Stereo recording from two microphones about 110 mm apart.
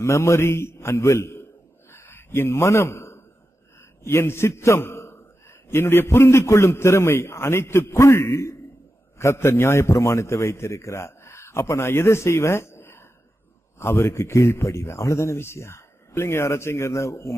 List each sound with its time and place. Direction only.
0.0 s speech: 25° left (ahead or behind)
1.9 s a sound: 20° left (ahead or behind)
4.0 s a man's voice: 25° left (ahead or behind)